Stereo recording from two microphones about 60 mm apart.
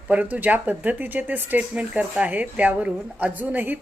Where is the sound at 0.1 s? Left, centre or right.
Right.